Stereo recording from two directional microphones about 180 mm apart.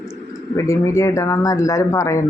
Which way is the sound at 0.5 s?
15° left (ahead or behind).